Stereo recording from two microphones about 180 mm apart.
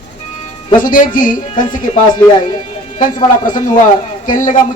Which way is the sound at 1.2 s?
25° left (ahead or behind).